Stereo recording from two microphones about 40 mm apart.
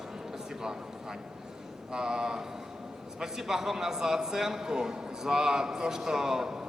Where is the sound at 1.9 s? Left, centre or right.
Centre.